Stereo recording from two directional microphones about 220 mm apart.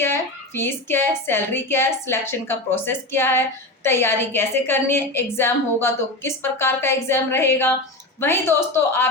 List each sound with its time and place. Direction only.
0.0 s a woman's voice: 10° left (ahead or behind)